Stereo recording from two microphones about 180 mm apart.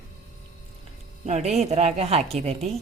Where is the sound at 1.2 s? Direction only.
40° right (ahead or behind).